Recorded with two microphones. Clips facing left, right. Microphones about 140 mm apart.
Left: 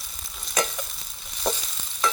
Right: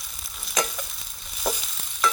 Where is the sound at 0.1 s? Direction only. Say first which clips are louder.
Left 1 dB; centre (ahead or behind).